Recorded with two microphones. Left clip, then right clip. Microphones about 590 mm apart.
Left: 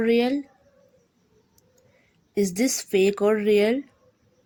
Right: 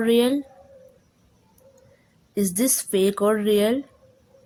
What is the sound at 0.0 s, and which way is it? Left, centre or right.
Speech, right.